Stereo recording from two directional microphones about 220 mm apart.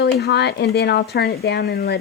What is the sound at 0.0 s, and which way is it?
Speech, 50° left (ahead or behind).